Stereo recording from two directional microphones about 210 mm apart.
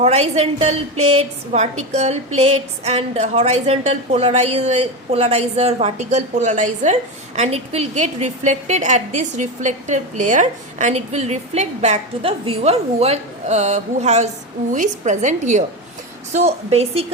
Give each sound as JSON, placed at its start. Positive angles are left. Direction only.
{"t": 0.0, "sound": "a woman's voice", "side_deg": -30}